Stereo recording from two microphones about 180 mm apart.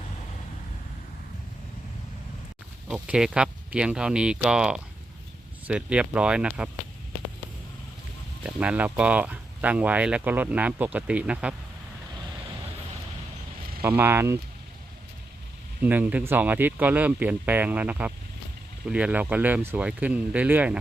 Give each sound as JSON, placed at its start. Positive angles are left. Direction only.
{"t": 2.9, "sound": "speech", "side_deg": -5}
{"t": 8.4, "sound": "speech", "side_deg": -5}
{"t": 13.8, "sound": "speech", "side_deg": -10}
{"t": 15.8, "sound": "speech", "side_deg": -10}